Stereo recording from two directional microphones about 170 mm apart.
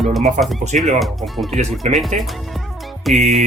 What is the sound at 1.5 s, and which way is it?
Speech, 45° right (ahead or behind).